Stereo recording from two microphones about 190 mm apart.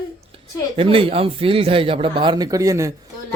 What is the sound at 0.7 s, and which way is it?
Speech, 30° right (ahead or behind).